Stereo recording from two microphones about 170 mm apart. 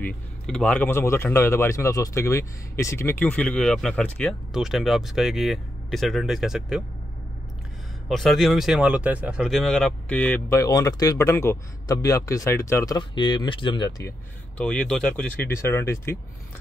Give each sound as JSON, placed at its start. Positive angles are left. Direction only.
{"t": 0.0, "sound": "speech", "side_deg": 5}
{"t": 8.1, "sound": "speech", "side_deg": 0}
{"t": 14.6, "sound": "speech", "side_deg": 5}